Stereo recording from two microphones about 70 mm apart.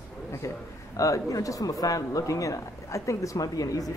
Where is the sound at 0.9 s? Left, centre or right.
Left.